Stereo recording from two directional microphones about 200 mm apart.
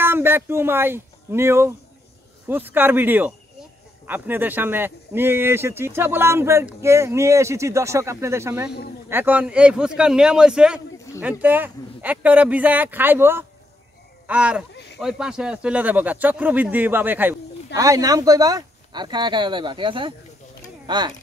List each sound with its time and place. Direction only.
0.0 s speech: 10° right (ahead or behind)
14.7 s a sound: 60° left (ahead or behind)
15.0 s speech: centre (ahead or behind); by 21.1 s 20° right (ahead or behind)